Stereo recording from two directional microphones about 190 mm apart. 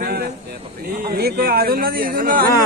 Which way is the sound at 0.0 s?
55° right (ahead or behind).